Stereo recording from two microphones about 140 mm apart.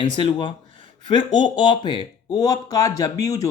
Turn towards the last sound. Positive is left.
turn(degrees=25)  # may be behind; listen again after turning